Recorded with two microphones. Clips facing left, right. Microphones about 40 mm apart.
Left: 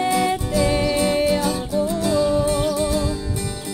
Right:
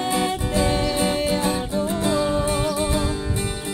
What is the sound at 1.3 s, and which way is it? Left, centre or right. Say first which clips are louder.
Music: left 2 dB; right.